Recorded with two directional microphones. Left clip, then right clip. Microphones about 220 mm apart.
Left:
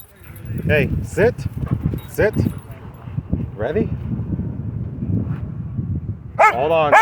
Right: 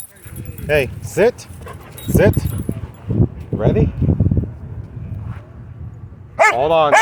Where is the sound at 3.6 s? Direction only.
20° right (ahead or behind).